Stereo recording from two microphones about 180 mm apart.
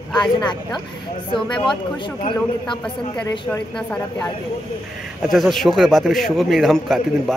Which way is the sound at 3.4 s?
5° left (ahead or behind).